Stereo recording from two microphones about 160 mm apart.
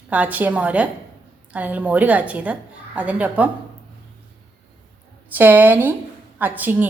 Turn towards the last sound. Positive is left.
turn(degrees=-10)  # may be behind; listen again after turning